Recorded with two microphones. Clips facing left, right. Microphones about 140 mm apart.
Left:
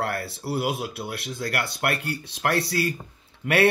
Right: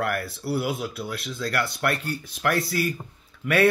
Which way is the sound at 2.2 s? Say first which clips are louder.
Even; 25° left (ahead or behind).